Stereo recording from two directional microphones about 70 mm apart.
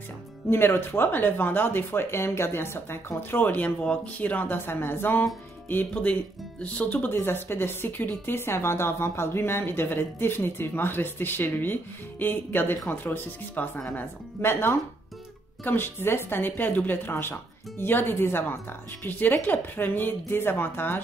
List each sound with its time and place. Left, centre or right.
0.5 s speech: left